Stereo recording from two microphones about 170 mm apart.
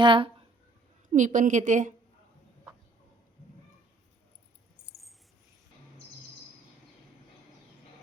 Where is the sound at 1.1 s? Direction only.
45° right (ahead or behind).